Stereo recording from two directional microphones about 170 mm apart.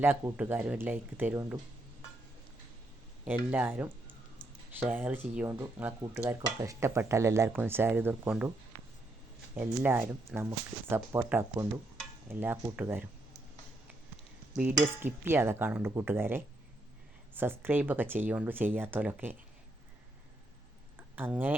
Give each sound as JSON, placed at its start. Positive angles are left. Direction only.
{"t": 0.0, "sound": "speech", "side_deg": -10}
{"t": 3.2, "sound": "speech", "side_deg": -10}
{"t": 5.5, "sound": "speech", "side_deg": -15}
{"t": 9.6, "sound": "speech", "side_deg": -10}
{"t": 14.5, "sound": "speech", "side_deg": -5}
{"t": 21.2, "sound": "speech", "side_deg": -10}